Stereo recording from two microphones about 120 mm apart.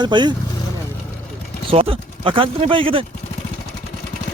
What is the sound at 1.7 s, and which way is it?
Speech, 50° right (ahead or behind).